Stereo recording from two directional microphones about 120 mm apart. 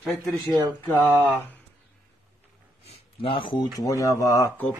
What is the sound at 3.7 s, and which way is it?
Speech, 25° left (ahead or behind).